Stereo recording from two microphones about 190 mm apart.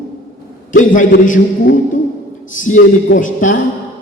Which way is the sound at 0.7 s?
45° left (ahead or behind).